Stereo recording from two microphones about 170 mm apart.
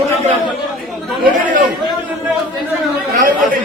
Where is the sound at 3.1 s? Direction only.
50° right (ahead or behind).